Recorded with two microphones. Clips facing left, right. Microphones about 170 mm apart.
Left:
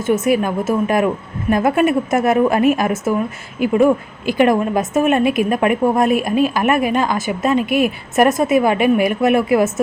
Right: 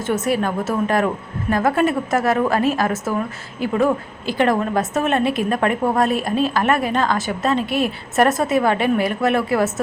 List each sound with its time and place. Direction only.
0.0 s a woman's voice: 10° left (ahead or behind)